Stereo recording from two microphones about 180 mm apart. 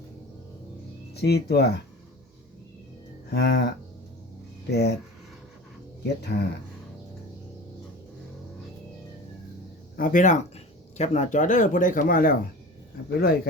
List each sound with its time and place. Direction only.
1.1 s speech: 65° left (ahead or behind)
3.2 s livestock: 65° left (ahead or behind)
4.7 s speech: 65° left (ahead or behind)
6.3 s speech: 60° left (ahead or behind)
10.0 s speech: 45° left (ahead or behind)